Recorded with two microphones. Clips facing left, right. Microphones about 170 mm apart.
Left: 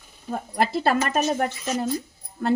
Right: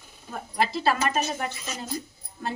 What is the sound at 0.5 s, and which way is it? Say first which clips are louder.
Speech: left 3 dB; 55° left (ahead or behind).